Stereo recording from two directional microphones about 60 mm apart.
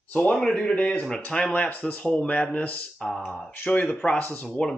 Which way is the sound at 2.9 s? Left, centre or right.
Centre.